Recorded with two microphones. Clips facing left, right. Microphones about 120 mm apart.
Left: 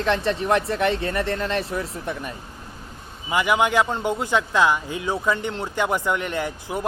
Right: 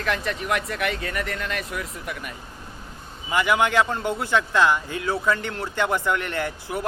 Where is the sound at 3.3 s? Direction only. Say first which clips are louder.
Left 1 dB; 20° left (ahead or behind).